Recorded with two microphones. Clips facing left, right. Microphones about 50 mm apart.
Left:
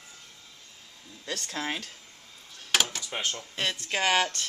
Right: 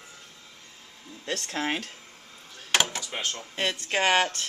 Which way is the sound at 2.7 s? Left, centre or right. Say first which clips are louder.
Right 2 dB; centre.